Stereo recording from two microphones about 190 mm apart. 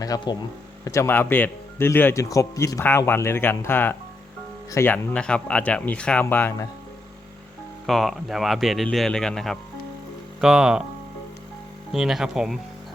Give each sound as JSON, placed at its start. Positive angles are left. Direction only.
{"t": 0.0, "sound": "speech", "side_deg": 20}
{"t": 7.9, "sound": "speech", "side_deg": 0}
{"t": 11.9, "sound": "speech", "side_deg": 0}